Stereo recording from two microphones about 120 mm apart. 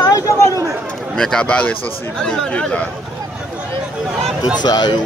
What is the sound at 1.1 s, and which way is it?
Speech, 5° left (ahead or behind).